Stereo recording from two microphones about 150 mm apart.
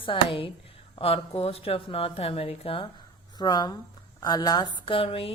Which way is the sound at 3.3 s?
25° left (ahead or behind).